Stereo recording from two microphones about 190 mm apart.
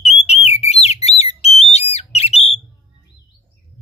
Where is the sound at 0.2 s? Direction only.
35° left (ahead or behind).